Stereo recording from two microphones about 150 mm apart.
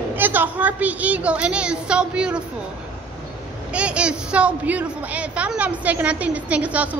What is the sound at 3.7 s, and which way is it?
A woman's voice, 5° right (ahead or behind).